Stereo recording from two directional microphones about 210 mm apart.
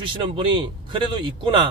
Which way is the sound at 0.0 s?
25° right (ahead or behind).